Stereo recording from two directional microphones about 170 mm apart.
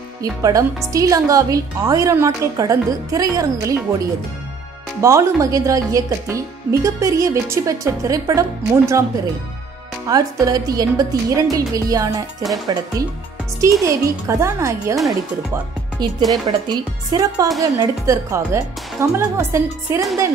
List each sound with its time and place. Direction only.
0.2 s a woman's voice: 20° right (ahead or behind)
5.0 s a woman's voice: 20° right (ahead or behind)
10.0 s a woman's voice: 20° right (ahead or behind)
13.6 s a woman's voice: 20° right (ahead or behind)